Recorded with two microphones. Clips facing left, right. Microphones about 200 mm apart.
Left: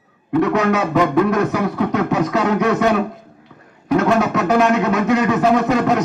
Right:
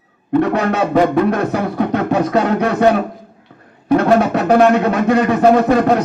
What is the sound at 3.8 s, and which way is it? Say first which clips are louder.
Music: right 3 dB; 35° right (ahead or behind).